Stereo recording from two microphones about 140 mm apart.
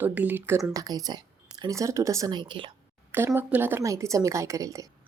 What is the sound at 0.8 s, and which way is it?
Speech, 25° right (ahead or behind).